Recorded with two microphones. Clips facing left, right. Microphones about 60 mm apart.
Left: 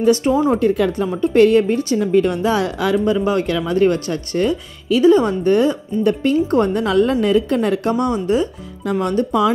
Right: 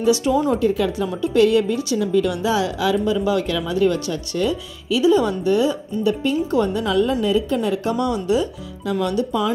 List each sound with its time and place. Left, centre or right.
0.0 s speech: left
7.9 s speech: left